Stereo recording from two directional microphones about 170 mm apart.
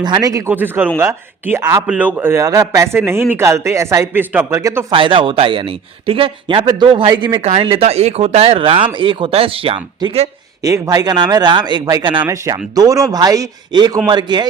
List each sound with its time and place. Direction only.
0.0 s speech: 25° right (ahead or behind)
4.9 s speech: 30° right (ahead or behind)
10.6 s speech: 20° right (ahead or behind)